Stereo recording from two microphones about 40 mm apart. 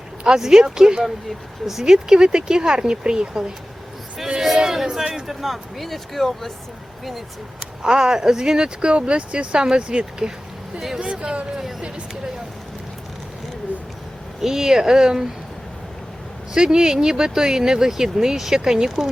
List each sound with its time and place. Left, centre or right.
0.3 s speech: centre
7.8 s speech: centre
11.0 s speech: right
14.4 s speech: centre
16.6 s speech: centre